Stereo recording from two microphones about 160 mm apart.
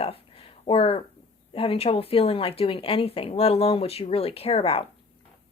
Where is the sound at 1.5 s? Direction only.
35° left (ahead or behind).